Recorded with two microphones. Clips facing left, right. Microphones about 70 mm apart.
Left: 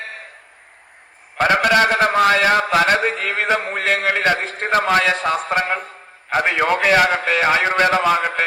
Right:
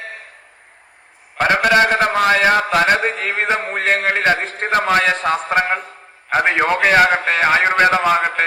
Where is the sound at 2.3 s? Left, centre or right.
Right.